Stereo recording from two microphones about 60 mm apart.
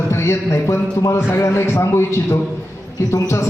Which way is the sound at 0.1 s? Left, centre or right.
Left.